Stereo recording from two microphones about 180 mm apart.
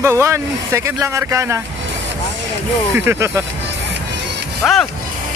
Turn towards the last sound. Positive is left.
turn(degrees=0)  # may be behind; listen again after turning